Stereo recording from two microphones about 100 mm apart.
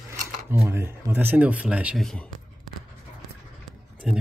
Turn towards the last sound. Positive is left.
turn(degrees=-5)  # may be behind; listen again after turning